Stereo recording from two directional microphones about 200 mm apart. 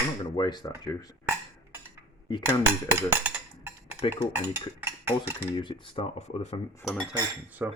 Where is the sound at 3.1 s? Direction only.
10° right (ahead or behind).